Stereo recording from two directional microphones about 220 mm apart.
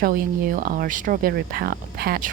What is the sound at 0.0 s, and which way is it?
Speech, 40° right (ahead or behind).